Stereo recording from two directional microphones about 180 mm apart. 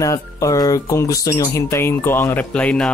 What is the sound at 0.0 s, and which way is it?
Speech, 20° left (ahead or behind).